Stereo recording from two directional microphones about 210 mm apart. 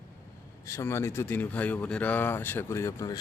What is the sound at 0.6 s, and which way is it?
Speech, 15° left (ahead or behind).